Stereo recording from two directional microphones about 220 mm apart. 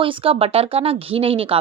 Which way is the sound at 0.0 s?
25° right (ahead or behind).